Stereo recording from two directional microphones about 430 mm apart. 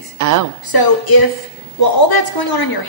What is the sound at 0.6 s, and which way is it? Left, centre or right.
A woman's voice, left.